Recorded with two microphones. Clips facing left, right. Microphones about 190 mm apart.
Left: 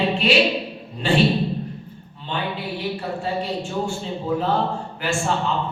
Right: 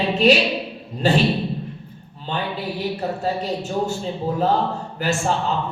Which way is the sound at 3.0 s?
40° right (ahead or behind).